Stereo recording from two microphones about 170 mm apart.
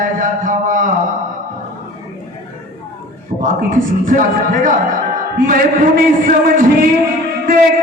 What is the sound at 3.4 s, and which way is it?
Speech, 50° right (ahead or behind).